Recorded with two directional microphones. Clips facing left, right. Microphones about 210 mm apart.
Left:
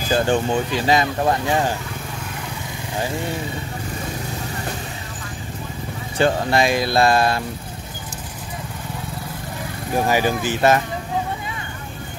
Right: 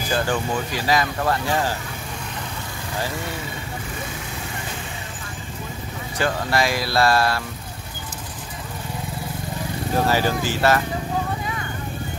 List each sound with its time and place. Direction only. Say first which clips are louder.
0.1 s speech: left 5 dB; 25° left (ahead or behind)
6.1 s speech: left 4 dB; 25° left (ahead or behind)
9.9 s speech: left 2 dB; 15° left (ahead or behind)